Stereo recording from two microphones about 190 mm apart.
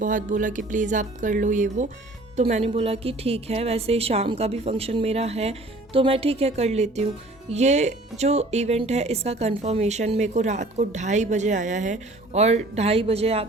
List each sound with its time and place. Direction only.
0.0 s speech: 45° right (ahead or behind)